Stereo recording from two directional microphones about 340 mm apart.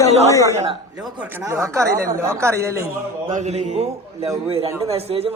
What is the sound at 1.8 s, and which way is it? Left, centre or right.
Speech, right.